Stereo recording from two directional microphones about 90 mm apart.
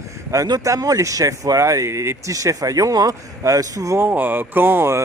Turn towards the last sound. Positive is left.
turn(degrees=-25)  # may be behind; listen again after turning